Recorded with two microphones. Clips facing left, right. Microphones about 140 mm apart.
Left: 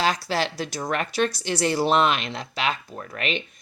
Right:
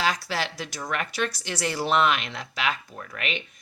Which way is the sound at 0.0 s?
30° left (ahead or behind).